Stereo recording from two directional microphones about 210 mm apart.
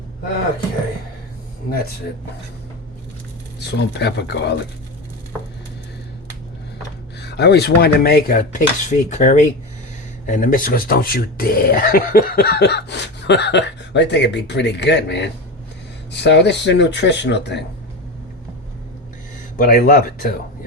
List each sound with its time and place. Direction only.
3.6 s speech: 55° left (ahead or behind)
7.2 s speech: 55° left (ahead or behind)
19.5 s speech: 40° left (ahead or behind)